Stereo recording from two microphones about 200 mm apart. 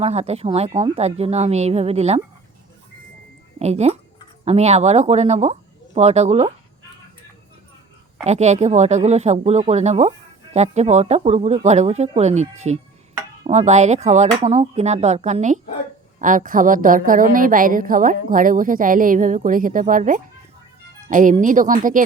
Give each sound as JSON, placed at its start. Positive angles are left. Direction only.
{"t": 0.0, "sound": "speech", "side_deg": -30}
{"t": 3.6, "sound": "speech", "side_deg": -35}
{"t": 8.2, "sound": "a woman's voice", "side_deg": -35}